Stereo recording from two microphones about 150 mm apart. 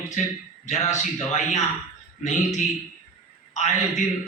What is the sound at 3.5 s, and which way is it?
Speech, 50° left (ahead or behind).